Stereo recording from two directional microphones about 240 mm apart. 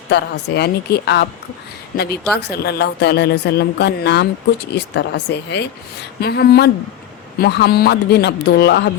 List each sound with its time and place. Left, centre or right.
0.1 s speech: left